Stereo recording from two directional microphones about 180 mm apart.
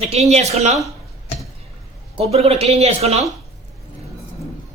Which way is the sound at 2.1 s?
35° right (ahead or behind).